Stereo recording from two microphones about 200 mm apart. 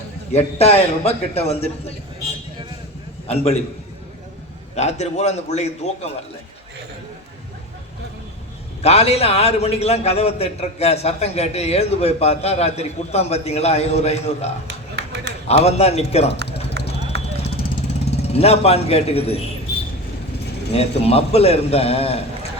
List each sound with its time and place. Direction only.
0.3 s a man's voice: 30° left (ahead or behind)
3.2 s a man's voice: 30° left (ahead or behind)
4.7 s a man's voice: 35° left (ahead or behind)
8.8 s a man's voice: 30° left (ahead or behind)
15.0 s a sound: 55° right (ahead or behind)
15.4 s a man's voice: 30° left (ahead or behind)
16.8 s clip-clop: 55° right (ahead or behind)
18.1 s a man's voice: 30° left (ahead or behind)
20.7 s a man's voice: 30° left (ahead or behind)